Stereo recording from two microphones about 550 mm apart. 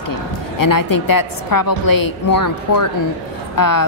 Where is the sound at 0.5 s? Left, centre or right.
Left.